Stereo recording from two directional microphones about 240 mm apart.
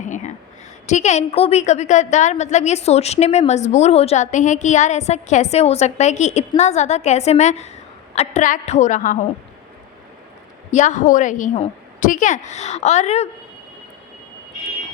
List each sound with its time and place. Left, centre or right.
0.0 s a sound: left
0.9 s a woman's voice: left
10.7 s a woman's voice: left